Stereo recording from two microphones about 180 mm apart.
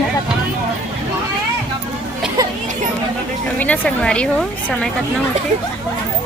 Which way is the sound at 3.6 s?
5° left (ahead or behind).